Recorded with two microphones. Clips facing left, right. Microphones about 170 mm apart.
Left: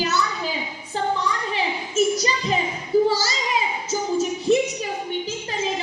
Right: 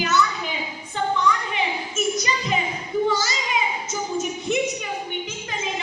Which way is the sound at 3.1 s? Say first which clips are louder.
Even; 35° left (ahead or behind).